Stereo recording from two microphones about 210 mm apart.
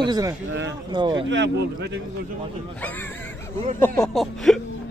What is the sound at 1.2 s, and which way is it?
Speech, 60° right (ahead or behind).